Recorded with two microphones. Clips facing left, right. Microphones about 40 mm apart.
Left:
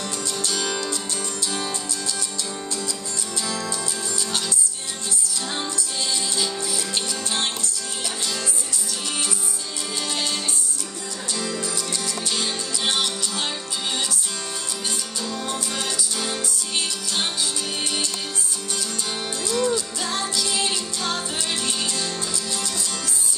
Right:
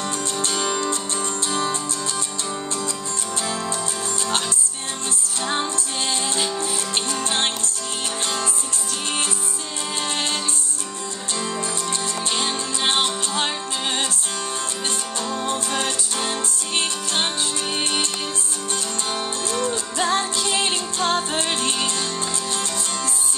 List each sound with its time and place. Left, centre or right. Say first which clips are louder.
0.0 s music: right 3 dB; right
3.4 s music: right 1 dB; right
5.5 s music: right 6 dB; right
10.0 s music: right 1 dB; right
15.2 s music: right 4 dB; right
19.4 s music: left 5 dB; right